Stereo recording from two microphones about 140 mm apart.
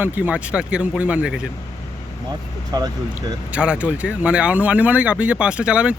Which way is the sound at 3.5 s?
10° right (ahead or behind).